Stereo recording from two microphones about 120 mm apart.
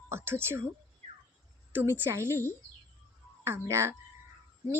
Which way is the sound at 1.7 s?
20° right (ahead or behind).